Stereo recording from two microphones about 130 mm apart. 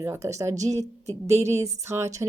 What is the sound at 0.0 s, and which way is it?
A woman's voice, 20° right (ahead or behind).